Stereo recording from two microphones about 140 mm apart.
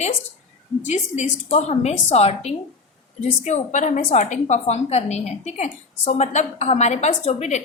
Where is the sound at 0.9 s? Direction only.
55° left (ahead or behind).